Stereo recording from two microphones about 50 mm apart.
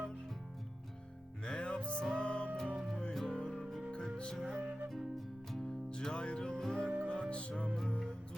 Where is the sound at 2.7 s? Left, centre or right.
Centre.